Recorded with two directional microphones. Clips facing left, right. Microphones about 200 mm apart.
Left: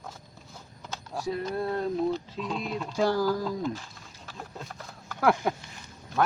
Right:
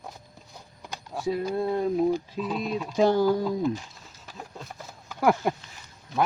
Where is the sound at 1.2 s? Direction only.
15° right (ahead or behind).